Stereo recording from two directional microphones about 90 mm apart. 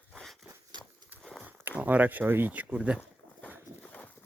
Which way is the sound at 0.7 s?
55° right (ahead or behind).